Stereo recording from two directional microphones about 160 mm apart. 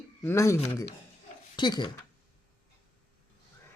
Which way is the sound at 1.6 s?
30° left (ahead or behind).